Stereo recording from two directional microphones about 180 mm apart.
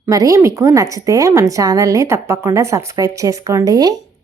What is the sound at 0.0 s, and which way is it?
A woman's voice, 20° right (ahead or behind).